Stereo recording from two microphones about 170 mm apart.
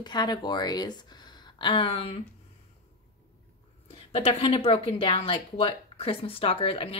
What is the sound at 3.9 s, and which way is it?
A woman's voice, 35° left (ahead or behind).